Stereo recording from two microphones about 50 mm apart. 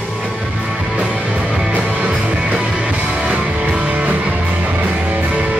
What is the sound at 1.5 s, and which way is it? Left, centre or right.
Music, centre.